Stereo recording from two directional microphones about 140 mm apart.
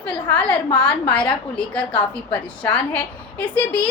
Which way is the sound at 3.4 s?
10° left (ahead or behind).